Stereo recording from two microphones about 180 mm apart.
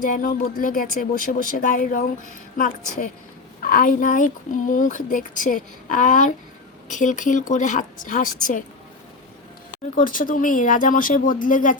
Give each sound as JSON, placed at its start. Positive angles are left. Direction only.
{"t": 0.0, "sound": "speech", "side_deg": 50}
{"t": 9.7, "sound": "speech", "side_deg": 50}